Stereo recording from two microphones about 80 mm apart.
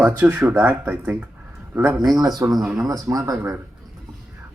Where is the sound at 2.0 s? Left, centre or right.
Right.